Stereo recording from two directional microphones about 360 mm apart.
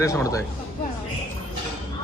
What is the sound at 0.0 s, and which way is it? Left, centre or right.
Speech, centre.